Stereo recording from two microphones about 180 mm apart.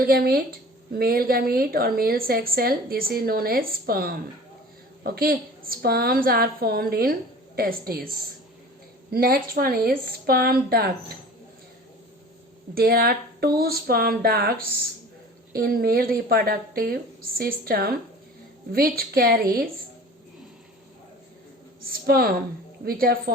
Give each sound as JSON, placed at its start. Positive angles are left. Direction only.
{"t": 0.1, "sound": "a woman's voice", "side_deg": -60}
{"t": 9.1, "sound": "a woman's voice", "side_deg": -55}
{"t": 12.7, "sound": "a woman's voice", "side_deg": -55}
{"t": 22.0, "sound": "a woman's voice", "side_deg": -55}